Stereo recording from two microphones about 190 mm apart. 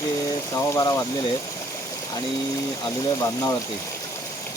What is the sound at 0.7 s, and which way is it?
Speech, 20° left (ahead or behind).